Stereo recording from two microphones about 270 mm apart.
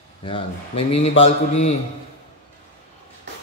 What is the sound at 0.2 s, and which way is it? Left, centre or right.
A man's voice, centre.